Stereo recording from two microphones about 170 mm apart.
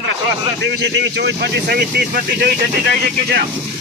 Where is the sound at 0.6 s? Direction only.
85° right; by 3.4 s 65° right (ahead or behind).